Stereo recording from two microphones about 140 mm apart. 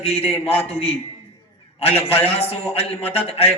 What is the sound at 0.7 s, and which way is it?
A man's voice, 45° left (ahead or behind).